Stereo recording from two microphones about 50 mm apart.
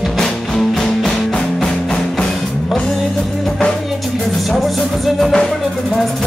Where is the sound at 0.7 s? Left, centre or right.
Centre.